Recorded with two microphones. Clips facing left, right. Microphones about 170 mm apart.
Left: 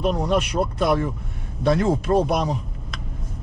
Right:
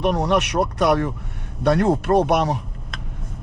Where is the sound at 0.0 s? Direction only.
75° right (ahead or behind).